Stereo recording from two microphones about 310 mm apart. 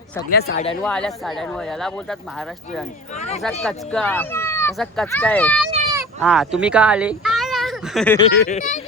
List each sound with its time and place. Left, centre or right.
0.3 s speech: left
0.8 s speech: centre
3.4 s speech: centre
8.4 s speech: left